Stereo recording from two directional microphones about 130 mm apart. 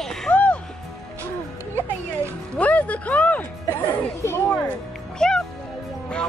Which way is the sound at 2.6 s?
10° left (ahead or behind).